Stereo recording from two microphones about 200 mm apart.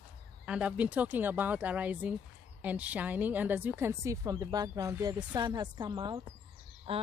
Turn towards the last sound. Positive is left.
turn(degrees=-30)  # may be behind; listen again after turning